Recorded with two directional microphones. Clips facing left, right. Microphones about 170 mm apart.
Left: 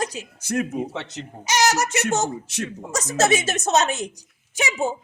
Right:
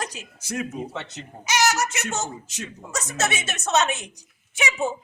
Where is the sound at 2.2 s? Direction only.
70° left (ahead or behind).